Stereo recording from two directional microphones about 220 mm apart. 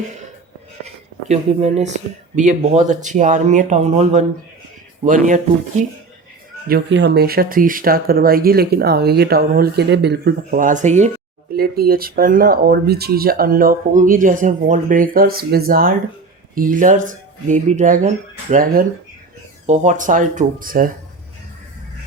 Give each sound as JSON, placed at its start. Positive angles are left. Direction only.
{"t": 1.3, "sound": "speech", "side_deg": -30}
{"t": 6.7, "sound": "speech", "side_deg": -45}
{"t": 11.5, "sound": "speech", "side_deg": -45}